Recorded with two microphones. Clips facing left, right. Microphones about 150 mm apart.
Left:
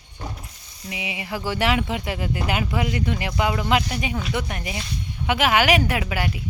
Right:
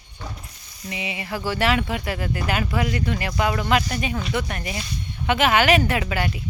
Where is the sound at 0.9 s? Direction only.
10° left (ahead or behind).